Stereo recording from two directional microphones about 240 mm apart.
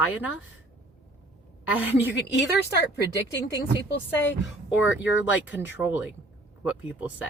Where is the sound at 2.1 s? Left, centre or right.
Left.